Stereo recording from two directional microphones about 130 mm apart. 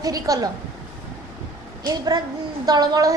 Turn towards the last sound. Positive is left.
turn(degrees=-30)  # may be behind; listen again after turning